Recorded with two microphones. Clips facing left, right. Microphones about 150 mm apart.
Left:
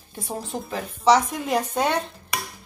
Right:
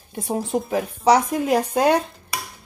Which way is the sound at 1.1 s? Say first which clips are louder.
Right 4 dB; 5° right (ahead or behind).